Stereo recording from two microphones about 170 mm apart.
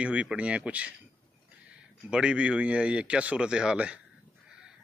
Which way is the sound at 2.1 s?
5° right (ahead or behind).